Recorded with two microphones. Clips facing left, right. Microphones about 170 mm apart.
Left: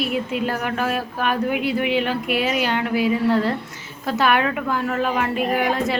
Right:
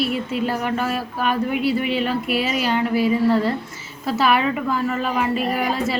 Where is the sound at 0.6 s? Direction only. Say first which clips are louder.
Even; 5° left (ahead or behind).